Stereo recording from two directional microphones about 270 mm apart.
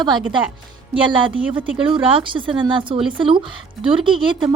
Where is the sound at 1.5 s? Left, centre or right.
Centre.